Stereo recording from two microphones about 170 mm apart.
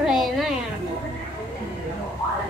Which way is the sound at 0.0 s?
Centre (ahead or behind).